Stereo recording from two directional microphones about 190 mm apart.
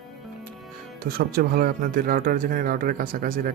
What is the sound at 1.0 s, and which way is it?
Speech, 55° right (ahead or behind).